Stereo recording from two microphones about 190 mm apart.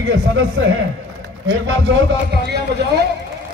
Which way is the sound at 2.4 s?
60° right (ahead or behind).